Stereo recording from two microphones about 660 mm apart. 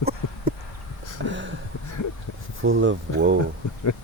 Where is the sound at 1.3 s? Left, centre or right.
Centre.